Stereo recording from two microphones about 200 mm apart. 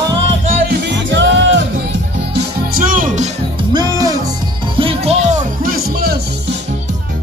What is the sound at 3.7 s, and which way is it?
Music, 20° right (ahead or behind).